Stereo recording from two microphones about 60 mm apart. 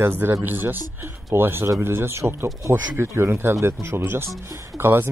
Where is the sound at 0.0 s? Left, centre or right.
Right.